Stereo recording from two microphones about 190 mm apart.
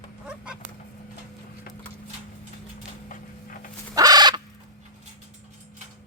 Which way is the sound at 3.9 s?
20° right (ahead or behind).